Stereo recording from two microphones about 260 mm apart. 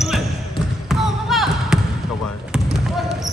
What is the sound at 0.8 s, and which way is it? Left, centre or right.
Basketball bounce, centre.